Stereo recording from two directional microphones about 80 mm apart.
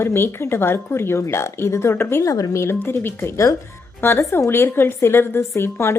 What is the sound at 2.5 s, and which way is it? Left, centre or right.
A woman's voice, left.